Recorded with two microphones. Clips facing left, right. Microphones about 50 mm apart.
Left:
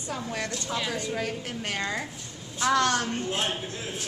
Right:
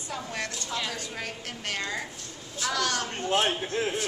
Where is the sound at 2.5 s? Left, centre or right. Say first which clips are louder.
Left 5 dB; left.